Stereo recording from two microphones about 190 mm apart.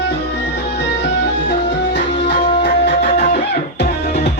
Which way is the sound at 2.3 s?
60° left (ahead or behind).